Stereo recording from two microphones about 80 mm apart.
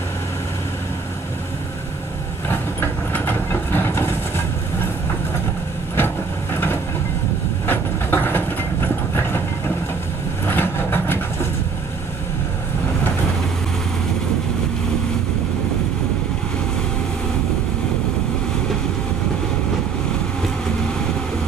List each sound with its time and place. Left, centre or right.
2.5 s vehicle: left
5.9 s vehicle: left
7.6 s train: left
10.4 s vehicle: left